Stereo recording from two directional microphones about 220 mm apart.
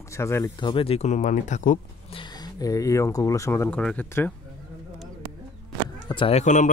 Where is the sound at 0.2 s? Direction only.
15° left (ahead or behind); by 1.8 s 35° left (ahead or behind).